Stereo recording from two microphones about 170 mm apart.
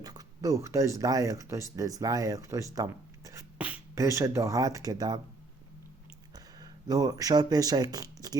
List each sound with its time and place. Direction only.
0.0 s speech: 20° right (ahead or behind)
3.9 s speech: 20° right (ahead or behind)
6.3 s speech: 20° right (ahead or behind)